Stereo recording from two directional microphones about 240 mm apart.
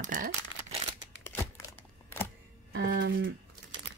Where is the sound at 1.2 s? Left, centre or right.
Centre.